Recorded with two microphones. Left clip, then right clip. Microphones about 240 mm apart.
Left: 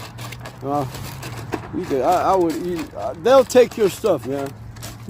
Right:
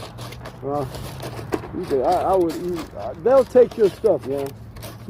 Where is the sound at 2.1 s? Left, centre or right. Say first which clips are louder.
Left 3 dB; left.